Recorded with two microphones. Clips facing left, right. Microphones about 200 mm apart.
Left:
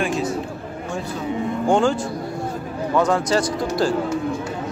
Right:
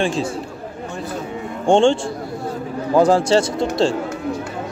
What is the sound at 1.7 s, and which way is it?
Speech, 30° right (ahead or behind).